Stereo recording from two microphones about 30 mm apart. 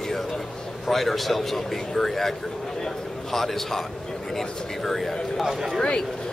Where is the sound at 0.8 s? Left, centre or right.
Centre.